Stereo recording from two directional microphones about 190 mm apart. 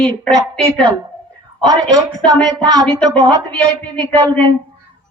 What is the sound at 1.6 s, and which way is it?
Speech, 20° right (ahead or behind).